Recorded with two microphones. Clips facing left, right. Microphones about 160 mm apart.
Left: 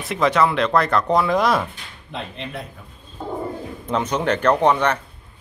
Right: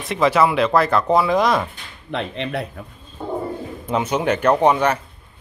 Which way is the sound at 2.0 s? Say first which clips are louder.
Right 6 dB; 75° right (ahead or behind).